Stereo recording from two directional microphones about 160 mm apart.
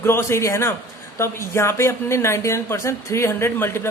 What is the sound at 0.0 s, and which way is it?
A woman's voice, 15° left (ahead or behind).